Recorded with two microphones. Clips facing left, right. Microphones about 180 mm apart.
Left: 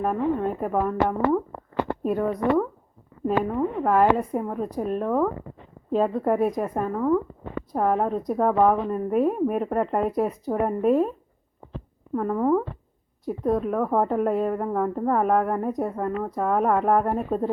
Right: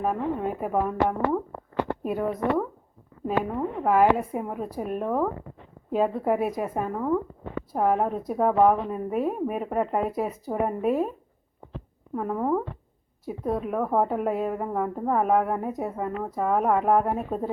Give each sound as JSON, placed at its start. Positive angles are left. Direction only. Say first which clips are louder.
{"t": 0.0, "sound": "a woman's voice", "louder": "left 3 dB", "side_deg": -5}
{"t": 12.1, "sound": "a woman's voice", "louder": "left 4 dB", "side_deg": -5}